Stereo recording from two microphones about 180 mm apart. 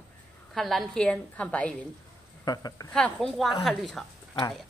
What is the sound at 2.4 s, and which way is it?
Speech, 20° left (ahead or behind).